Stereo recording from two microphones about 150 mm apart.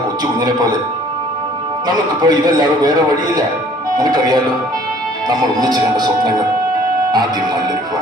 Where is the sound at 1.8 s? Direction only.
25° right (ahead or behind).